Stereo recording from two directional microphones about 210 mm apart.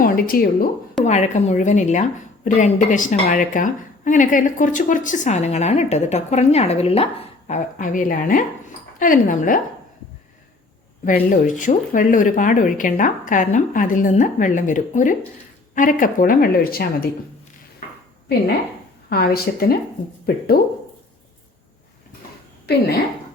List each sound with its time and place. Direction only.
0.0 s speech: 45° left (ahead or behind)
1.0 s speech: 35° left (ahead or behind)
11.0 s speech: 40° left (ahead or behind)
19.1 s a woman's voice: 45° left (ahead or behind)
22.7 s a woman's voice: 50° left (ahead or behind)